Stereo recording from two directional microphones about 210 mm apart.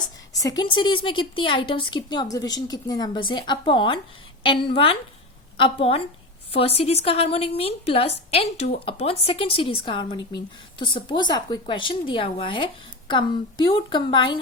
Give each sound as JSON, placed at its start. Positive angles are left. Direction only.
{"t": 0.0, "sound": "a woman's voice", "side_deg": 15}